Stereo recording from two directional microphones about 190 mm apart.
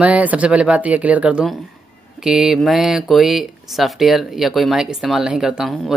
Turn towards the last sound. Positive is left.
turn(degrees=0)  # may be behind; listen again after turning